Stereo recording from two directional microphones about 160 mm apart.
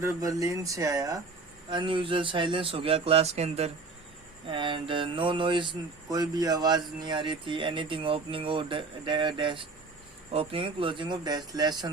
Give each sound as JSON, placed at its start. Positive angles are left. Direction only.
{"t": 0.0, "sound": "speech", "side_deg": -20}
{"t": 1.7, "sound": "speech", "side_deg": -30}
{"t": 4.4, "sound": "speech", "side_deg": -30}